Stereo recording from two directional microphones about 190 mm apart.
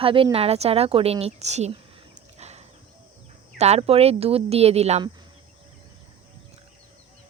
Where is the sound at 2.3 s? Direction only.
35° right (ahead or behind).